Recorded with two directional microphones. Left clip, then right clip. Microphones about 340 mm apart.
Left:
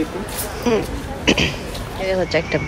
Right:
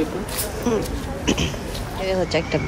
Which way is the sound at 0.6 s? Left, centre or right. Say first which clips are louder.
Left 5 dB; centre.